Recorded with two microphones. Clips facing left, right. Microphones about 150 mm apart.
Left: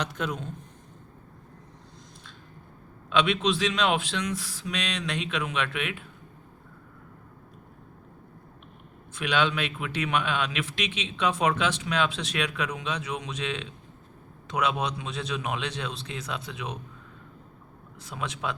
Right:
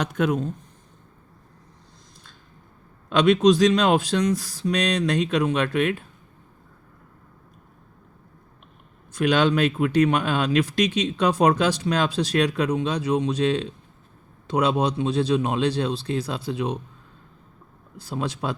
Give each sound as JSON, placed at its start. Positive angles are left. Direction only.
{"t": 0.0, "sound": "speech", "side_deg": -50}
{"t": 3.1, "sound": "speech", "side_deg": -45}
{"t": 9.1, "sound": "speech", "side_deg": -45}
{"t": 17.9, "sound": "speech", "side_deg": -35}